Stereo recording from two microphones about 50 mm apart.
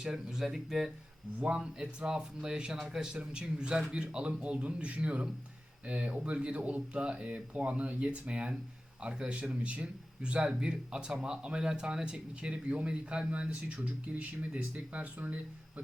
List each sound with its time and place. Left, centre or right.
0.0 s speech: centre
1.4 s speech: right